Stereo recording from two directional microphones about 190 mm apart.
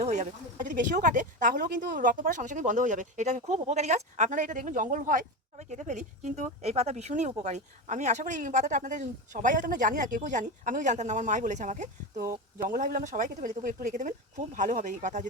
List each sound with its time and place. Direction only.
0.0 s speech: 40° right (ahead or behind)